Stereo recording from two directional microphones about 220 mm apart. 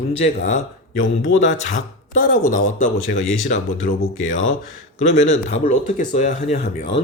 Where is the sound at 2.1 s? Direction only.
40° left (ahead or behind).